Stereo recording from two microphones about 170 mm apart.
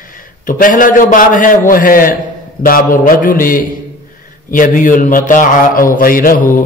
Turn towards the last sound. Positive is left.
turn(degrees=55)  # may be behind; listen again after turning